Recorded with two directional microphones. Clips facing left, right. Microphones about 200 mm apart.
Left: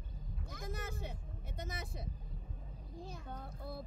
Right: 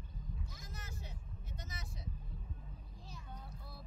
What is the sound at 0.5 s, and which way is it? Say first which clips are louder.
Vehicle: left 9 dB; 55° left (ahead or behind).